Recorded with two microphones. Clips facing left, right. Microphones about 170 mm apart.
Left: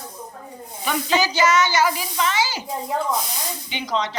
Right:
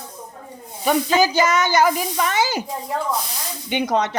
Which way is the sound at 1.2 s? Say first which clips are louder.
Right 2 dB; 50° right (ahead or behind).